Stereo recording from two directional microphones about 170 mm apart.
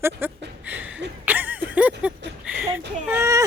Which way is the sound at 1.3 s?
10° right (ahead or behind).